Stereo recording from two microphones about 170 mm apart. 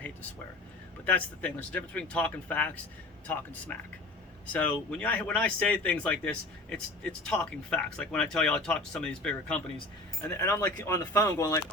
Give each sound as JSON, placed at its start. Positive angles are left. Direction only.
{"t": 1.0, "sound": "speech", "side_deg": 10}